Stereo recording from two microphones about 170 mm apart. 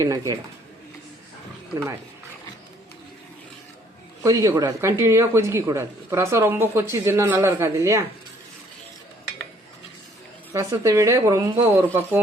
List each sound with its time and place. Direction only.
0.0 s speech: 20° right (ahead or behind)
4.2 s speech: 20° right (ahead or behind)
10.5 s speech: 20° right (ahead or behind)